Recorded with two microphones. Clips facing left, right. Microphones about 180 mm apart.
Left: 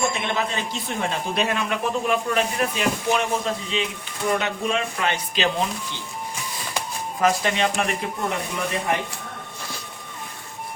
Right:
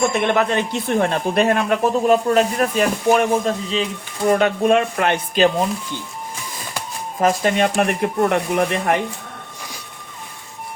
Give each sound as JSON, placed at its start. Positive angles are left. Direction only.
{"t": 0.1, "sound": "speech", "side_deg": -60}
{"t": 7.2, "sound": "speech", "side_deg": -45}